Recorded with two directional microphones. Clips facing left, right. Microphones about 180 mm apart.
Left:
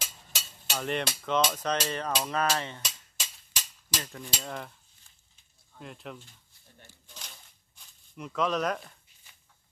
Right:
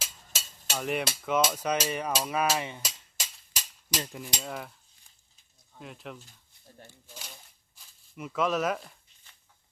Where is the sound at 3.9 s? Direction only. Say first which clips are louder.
Right 3 dB; 15° right (ahead or behind).